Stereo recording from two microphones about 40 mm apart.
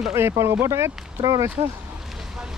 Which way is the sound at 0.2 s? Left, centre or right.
Right.